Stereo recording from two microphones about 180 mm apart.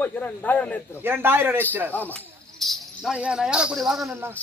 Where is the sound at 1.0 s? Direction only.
10° right (ahead or behind).